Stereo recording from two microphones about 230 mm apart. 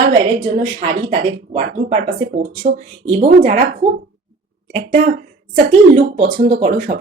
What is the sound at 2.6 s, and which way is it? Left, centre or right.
Speech, right.